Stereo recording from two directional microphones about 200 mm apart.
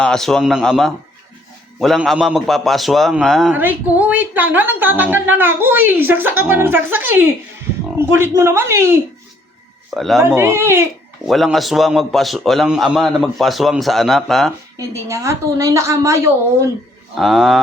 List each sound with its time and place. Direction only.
0.0 s a man's voice: 5° left (ahead or behind); by 9.0 s 10° right (ahead or behind)
9.9 s a man's voice: centre (ahead or behind)
10.2 s a woman's voice: 10° right (ahead or behind)
11.3 s a man's voice: centre (ahead or behind)
14.8 s a woman's voice: 15° right (ahead or behind)
17.2 s a man's voice: centre (ahead or behind)